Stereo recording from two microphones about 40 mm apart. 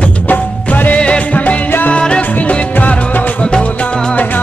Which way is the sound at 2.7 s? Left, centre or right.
Left.